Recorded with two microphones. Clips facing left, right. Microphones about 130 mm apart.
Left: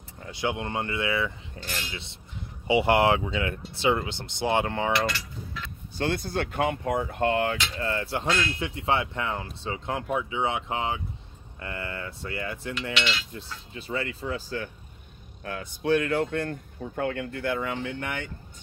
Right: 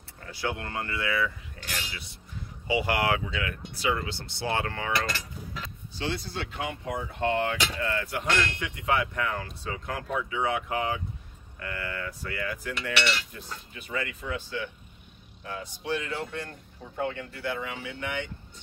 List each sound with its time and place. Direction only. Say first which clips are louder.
0.3 s speech: left 3 dB; 20° left (ahead or behind)
5.9 s speech: left 5 dB; 50° left (ahead or behind)
7.8 s speech: left 2 dB; 30° left (ahead or behind)
15.4 s speech: left 6 dB; 55° left (ahead or behind)